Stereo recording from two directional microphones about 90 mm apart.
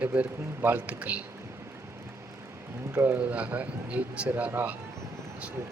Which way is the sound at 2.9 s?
25° right (ahead or behind).